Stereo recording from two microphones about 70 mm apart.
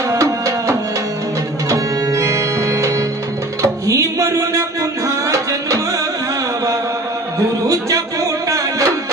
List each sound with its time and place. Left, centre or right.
0.1 s music: right
7.3 s music: right